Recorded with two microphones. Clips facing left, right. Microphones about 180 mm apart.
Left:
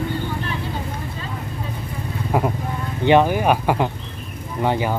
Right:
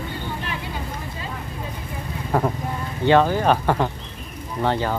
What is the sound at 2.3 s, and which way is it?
Speech, 10° left (ahead or behind).